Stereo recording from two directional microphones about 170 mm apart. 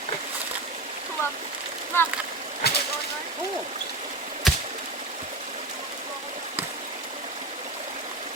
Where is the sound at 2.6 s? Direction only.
70° left (ahead or behind).